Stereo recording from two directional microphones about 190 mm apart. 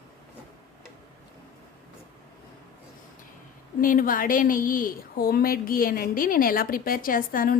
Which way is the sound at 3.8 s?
45° left (ahead or behind).